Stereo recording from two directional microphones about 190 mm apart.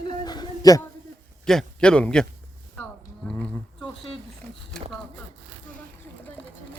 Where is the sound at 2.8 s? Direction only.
5° left (ahead or behind).